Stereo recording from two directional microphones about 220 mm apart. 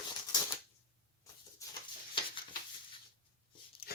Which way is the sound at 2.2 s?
25° left (ahead or behind).